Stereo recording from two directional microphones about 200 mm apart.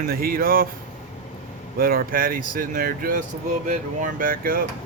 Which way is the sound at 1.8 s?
45° right (ahead or behind).